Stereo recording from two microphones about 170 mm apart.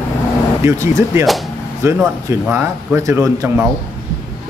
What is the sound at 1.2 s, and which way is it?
Speech, centre (ahead or behind).